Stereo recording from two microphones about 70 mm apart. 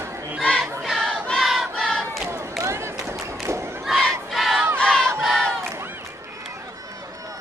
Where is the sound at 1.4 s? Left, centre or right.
Centre.